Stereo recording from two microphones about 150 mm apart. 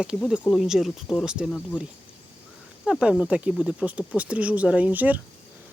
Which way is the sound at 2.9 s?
5° right (ahead or behind).